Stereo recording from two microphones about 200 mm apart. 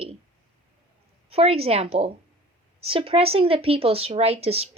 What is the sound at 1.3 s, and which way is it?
Speech, 30° right (ahead or behind).